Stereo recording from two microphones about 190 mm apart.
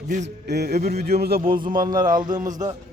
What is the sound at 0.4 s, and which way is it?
A man's voice, 60° right (ahead or behind).